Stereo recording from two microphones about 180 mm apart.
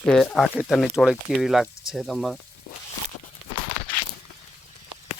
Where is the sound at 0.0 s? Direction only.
Centre (ahead or behind).